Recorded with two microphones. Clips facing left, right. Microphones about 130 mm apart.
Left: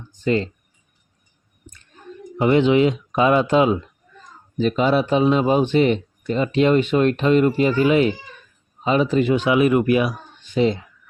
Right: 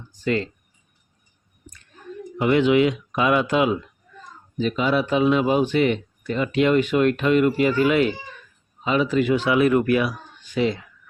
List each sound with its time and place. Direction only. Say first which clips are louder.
0.1 s speech: left 3 dB; 25° left (ahead or behind)
1.7 s a sound: left 1 dB; 25° left (ahead or behind)
2.4 s speech: left 2 dB; 25° left (ahead or behind)
4.5 s speech: left 3 dB; 40° left (ahead or behind)